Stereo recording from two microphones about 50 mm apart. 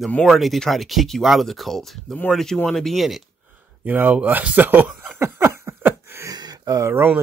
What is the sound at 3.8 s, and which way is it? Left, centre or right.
Speech, right.